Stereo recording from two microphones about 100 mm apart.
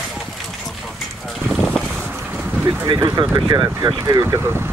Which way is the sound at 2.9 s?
45° right (ahead or behind).